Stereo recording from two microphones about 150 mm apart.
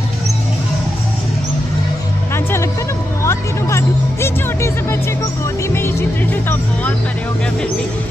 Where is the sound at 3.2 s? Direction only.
20° left (ahead or behind).